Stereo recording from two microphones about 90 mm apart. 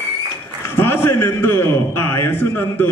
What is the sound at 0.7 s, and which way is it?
A man's voice, 25° left (ahead or behind).